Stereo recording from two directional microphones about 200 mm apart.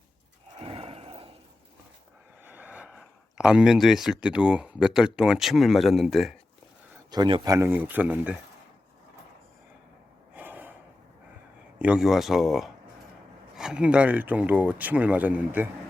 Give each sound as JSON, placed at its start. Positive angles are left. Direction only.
{"t": 0.6, "sound": "a sound", "side_deg": -30}
{"t": 2.4, "sound": "speech", "side_deg": -10}
{"t": 7.1, "sound": "speech", "side_deg": -20}
{"t": 10.3, "sound": "gasp", "side_deg": -10}
{"t": 11.8, "sound": "speech", "side_deg": -5}